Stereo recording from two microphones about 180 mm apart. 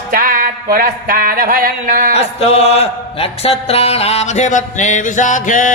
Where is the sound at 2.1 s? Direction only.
35° left (ahead or behind).